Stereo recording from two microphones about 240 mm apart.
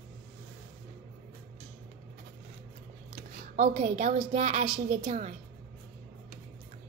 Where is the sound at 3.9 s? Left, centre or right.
Right.